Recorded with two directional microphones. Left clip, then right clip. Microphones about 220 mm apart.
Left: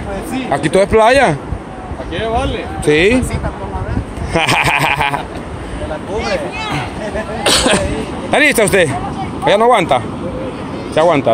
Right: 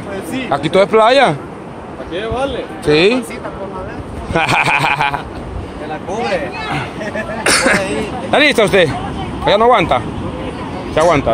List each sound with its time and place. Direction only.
0.3 s speech: 10° left (ahead or behind)
2.9 s speech: 20° left (ahead or behind)
4.3 s speech: 15° left (ahead or behind)
7.4 s a sound: 15° left (ahead or behind)
8.3 s speech: 15° left (ahead or behind)